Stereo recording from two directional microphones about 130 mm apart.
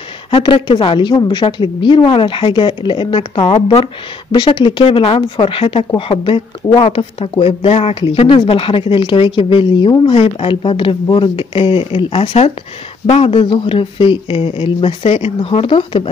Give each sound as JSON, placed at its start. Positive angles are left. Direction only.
{"t": 0.3, "sound": "a woman's voice", "side_deg": 40}